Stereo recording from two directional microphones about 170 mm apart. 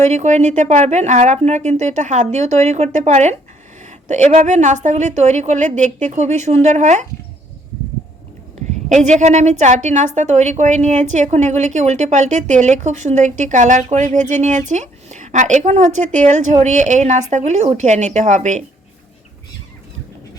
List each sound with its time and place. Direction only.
0.0 s a woman's voice: 45° right (ahead or behind)
8.9 s a woman's voice: 45° right (ahead or behind)